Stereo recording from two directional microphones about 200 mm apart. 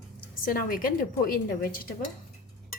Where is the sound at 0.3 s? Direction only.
45° left (ahead or behind).